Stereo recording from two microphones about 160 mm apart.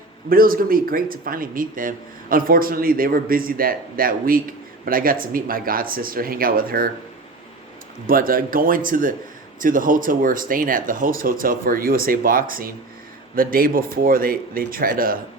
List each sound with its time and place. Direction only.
0.3 s speech: 65° right (ahead or behind)
8.0 s speech: 65° right (ahead or behind)